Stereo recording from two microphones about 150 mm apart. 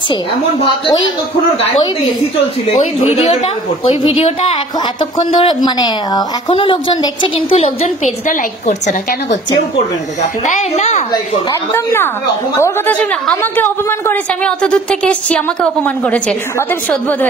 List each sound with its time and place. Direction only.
3.8 s a woman's voice: 30° left (ahead or behind); by 9.4 s 50° left (ahead or behind)
10.4 s a woman's voice: 50° left (ahead or behind)
11.7 s a woman's voice: 15° left (ahead or behind)